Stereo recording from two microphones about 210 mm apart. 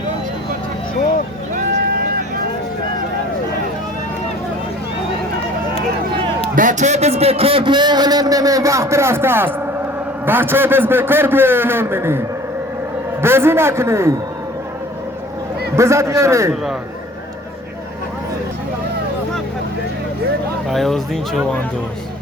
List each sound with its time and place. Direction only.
6.6 s a man's voice: 35° right (ahead or behind); by 12.2 s 10° right (ahead or behind)
13.2 s a man's voice: 10° right (ahead or behind)
15.7 s a man's voice: 15° right (ahead or behind)
20.7 s speech: centre (ahead or behind)